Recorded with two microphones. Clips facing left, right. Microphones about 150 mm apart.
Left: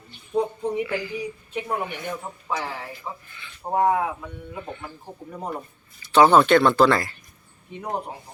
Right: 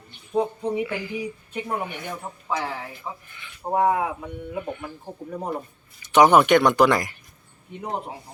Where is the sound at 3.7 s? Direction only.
5° right (ahead or behind).